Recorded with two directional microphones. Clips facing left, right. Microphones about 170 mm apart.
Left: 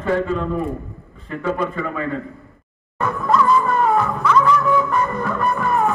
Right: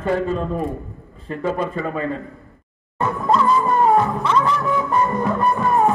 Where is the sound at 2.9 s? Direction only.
25° right (ahead or behind).